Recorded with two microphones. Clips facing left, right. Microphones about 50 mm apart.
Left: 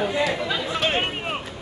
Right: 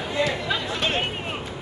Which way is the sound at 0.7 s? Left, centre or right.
Centre.